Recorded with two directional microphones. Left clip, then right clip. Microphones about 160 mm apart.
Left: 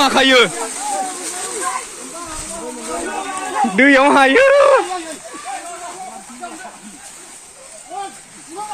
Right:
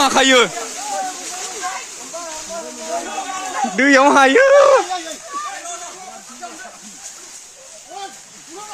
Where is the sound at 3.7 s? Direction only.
5° right (ahead or behind).